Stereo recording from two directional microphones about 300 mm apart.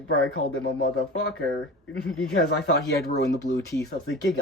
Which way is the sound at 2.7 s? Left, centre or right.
Left.